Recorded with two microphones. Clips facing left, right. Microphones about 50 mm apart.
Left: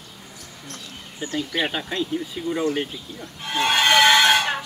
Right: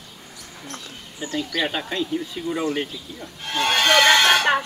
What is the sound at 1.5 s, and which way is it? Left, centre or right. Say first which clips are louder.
Speech: even; centre.